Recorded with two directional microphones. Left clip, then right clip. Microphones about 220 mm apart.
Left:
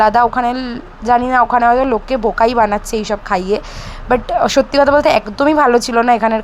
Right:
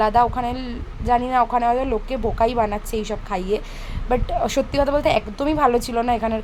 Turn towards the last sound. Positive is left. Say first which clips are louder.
# left 9 dB
turn(degrees=25)  # may be behind; listen again after turning